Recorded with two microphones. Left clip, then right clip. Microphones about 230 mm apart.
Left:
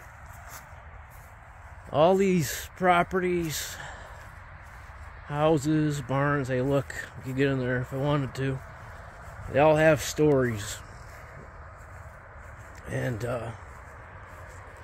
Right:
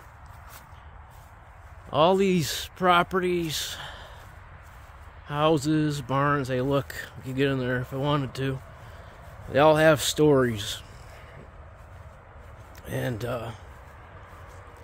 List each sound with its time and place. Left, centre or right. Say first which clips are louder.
1.9 s speech: right 1 dB; centre
5.3 s speech: right 1 dB; centre
12.8 s speech: right 1 dB; centre